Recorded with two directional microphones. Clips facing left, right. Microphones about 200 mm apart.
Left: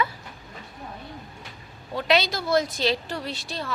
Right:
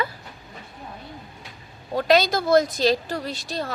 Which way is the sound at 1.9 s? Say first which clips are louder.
Right 4 dB; 40° right (ahead or behind).